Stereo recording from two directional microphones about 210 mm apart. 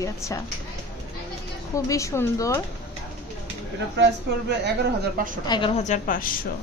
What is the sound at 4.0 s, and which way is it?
Speech, 55° right (ahead or behind).